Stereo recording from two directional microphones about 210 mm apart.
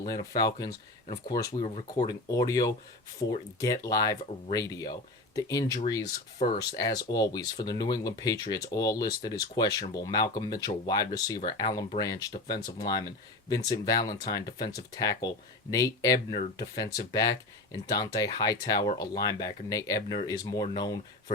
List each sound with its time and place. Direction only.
0.1 s speech: 15° left (ahead or behind)
1.6 s speech: 30° left (ahead or behind)
2.0 s speech: 15° left (ahead or behind)